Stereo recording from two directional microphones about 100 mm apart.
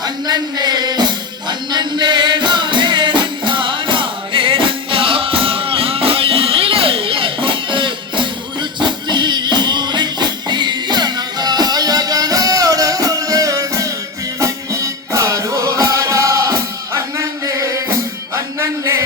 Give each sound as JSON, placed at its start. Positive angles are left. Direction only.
{"t": 0.0, "sound": "music", "side_deg": -40}